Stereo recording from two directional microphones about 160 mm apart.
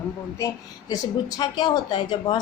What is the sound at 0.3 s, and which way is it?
A woman's voice, 20° left (ahead or behind).